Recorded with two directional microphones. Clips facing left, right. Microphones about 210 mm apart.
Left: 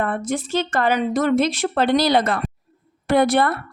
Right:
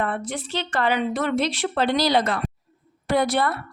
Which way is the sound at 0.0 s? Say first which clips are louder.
Left 4 dB; 45° left (ahead or behind).